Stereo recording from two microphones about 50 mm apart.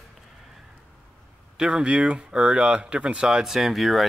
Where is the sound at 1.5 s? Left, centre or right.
Centre.